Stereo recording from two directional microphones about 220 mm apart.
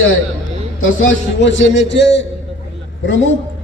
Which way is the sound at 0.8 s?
65° left (ahead or behind).